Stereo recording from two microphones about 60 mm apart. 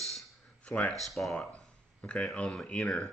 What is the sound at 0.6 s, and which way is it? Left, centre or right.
Speech, left.